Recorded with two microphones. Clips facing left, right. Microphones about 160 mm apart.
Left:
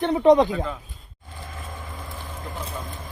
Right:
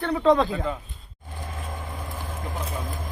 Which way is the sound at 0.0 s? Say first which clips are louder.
Left 4 dB; 20° left (ahead or behind).